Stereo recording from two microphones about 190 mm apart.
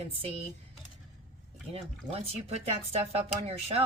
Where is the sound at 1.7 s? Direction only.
30° right (ahead or behind).